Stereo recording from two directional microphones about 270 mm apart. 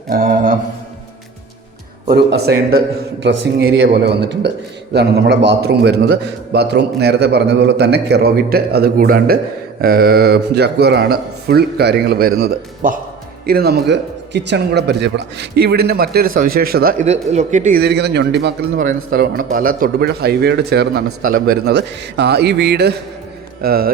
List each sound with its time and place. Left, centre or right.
0.1 s speech: right
2.0 s speech: right